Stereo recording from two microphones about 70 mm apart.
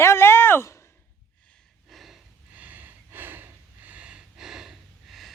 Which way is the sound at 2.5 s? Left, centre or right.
Right.